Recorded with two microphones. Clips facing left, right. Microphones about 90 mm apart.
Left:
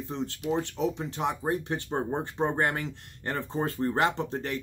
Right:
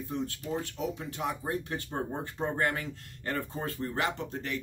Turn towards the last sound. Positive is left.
turn(degrees=30)  # may be behind; listen again after turning